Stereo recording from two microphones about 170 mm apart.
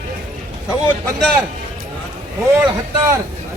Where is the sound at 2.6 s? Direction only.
15° right (ahead or behind).